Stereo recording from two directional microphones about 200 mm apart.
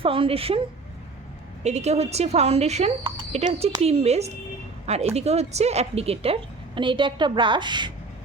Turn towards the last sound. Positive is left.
turn(degrees=-20)  # may be behind; listen again after turning